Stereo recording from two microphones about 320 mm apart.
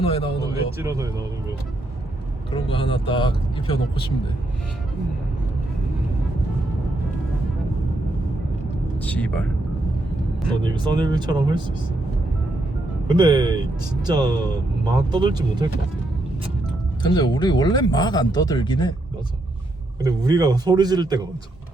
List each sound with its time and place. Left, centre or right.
0.0 s speech: centre
0.8 s speech: centre
2.5 s speech: centre
9.0 s speech: centre
10.8 s speech: centre
13.1 s speech: centre
17.0 s speech: centre
20.0 s speech: centre